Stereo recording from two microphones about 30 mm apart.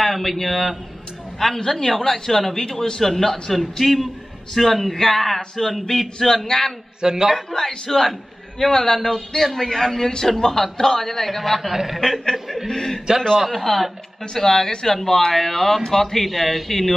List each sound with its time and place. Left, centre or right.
0.0 s a man's voice: centre
1.7 s a man's voice: centre
3.5 s a man's voice: centre
6.1 s a man's voice: centre
7.0 s a man's voice: right
7.5 s a man's voice: centre
11.6 s a man's voice: centre
12.6 s a man's voice: centre
13.5 s a man's voice: centre
14.3 s a man's voice: centre